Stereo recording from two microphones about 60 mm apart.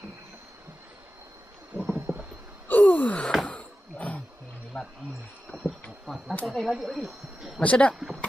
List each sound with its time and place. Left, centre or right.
1.8 s stomach rumble: right
2.7 s a sound: left
4.7 s a sound: centre
6.4 s speech: centre
7.6 s speech: left
7.9 s speech: centre